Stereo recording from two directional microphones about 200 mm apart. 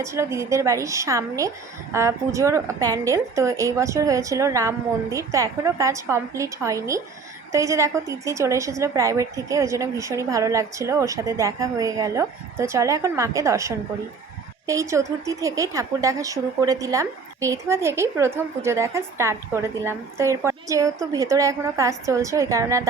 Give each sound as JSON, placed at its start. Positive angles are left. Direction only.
{"t": 0.0, "sound": "a woman's voice", "side_deg": -15}